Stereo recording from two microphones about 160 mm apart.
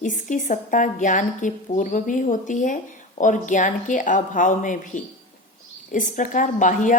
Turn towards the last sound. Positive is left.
turn(degrees=55)  # may be behind; listen again after turning